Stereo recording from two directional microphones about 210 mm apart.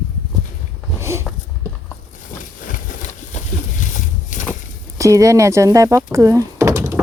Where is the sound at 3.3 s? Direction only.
35° left (ahead or behind).